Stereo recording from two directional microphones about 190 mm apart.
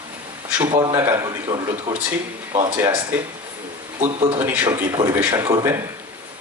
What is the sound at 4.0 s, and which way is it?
Speech, 30° right (ahead or behind).